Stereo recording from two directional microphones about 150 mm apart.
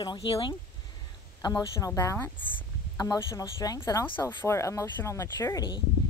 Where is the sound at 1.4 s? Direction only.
25° left (ahead or behind).